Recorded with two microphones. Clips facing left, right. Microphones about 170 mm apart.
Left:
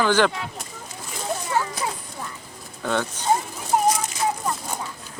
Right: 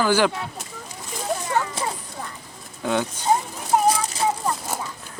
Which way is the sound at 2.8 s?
10° right (ahead or behind).